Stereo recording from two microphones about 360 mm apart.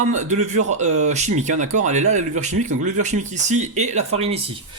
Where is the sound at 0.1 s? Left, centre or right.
Centre.